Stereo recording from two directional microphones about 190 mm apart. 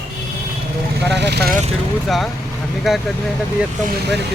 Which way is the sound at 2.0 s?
Centre (ahead or behind).